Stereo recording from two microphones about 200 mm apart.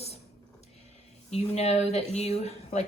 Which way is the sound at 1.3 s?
30° left (ahead or behind).